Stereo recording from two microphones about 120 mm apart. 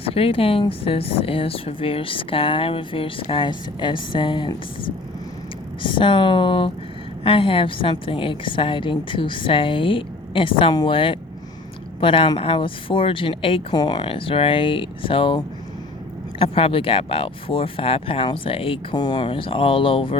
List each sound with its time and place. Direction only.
0.0 s speech: 55° left (ahead or behind)
5.8 s speech: 45° left (ahead or behind)
13.7 s speech: 35° left (ahead or behind)
16.4 s speech: 50° left (ahead or behind)
18.9 s speech: 35° left (ahead or behind)